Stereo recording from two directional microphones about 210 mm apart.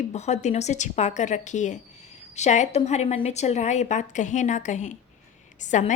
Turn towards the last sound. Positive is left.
turn(degrees=35)  # may be behind; listen again after turning